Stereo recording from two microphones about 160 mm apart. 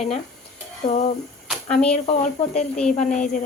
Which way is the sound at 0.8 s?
45° left (ahead or behind).